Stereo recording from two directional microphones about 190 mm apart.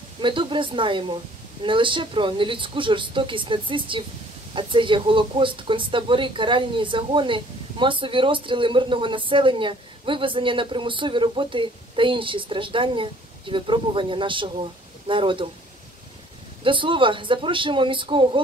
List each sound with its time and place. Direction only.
0.2 s speech: 25° right (ahead or behind)
16.6 s speech: 25° right (ahead or behind)